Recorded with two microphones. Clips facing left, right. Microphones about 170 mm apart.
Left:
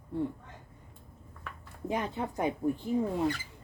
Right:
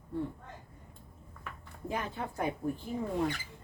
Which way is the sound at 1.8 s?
20° left (ahead or behind).